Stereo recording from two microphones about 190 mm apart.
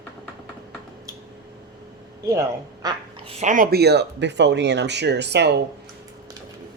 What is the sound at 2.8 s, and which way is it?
Speech, 30° right (ahead or behind).